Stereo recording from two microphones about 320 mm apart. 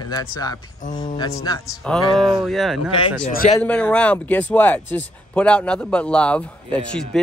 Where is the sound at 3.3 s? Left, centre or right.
Left.